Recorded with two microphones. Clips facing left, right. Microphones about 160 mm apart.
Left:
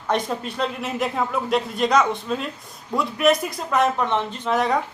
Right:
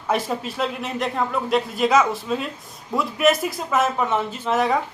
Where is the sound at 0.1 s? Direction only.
5° right (ahead or behind).